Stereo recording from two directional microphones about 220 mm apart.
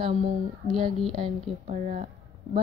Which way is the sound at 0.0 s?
30° right (ahead or behind).